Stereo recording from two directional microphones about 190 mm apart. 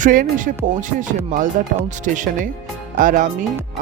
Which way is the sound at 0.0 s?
45° right (ahead or behind).